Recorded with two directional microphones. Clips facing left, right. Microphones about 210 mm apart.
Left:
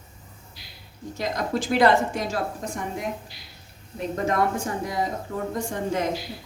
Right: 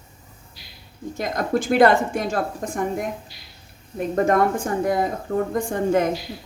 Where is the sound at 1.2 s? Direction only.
50° right (ahead or behind).